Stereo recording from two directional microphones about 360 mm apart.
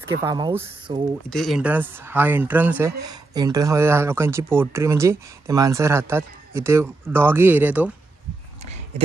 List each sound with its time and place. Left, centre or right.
0.2 s speech: centre
1.3 s speech: centre
8.6 s a sound: centre